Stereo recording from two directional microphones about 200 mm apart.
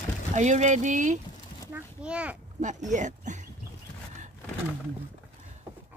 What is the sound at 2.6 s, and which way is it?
Speech, 35° right (ahead or behind).